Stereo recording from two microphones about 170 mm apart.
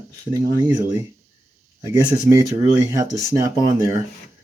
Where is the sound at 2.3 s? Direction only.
20° right (ahead or behind).